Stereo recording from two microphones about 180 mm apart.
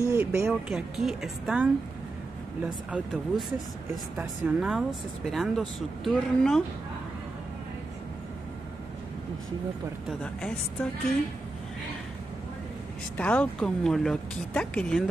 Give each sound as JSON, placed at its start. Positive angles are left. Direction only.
{"t": 0.0, "sound": "speech", "side_deg": -15}
{"t": 0.5, "sound": "speech", "side_deg": -5}
{"t": 10.0, "sound": "speech", "side_deg": 5}
{"t": 13.2, "sound": "speech", "side_deg": 5}